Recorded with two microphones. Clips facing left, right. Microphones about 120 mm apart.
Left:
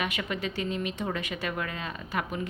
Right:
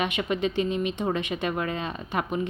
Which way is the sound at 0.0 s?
25° right (ahead or behind).